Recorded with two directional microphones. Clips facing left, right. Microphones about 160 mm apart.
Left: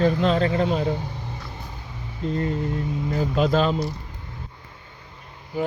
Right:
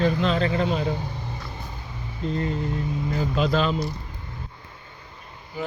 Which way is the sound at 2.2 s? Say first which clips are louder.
Left 2 dB; 50° left (ahead or behind).